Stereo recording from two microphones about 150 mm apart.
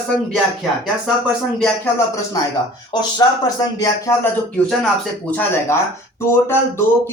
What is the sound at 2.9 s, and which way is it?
Speech, 25° left (ahead or behind).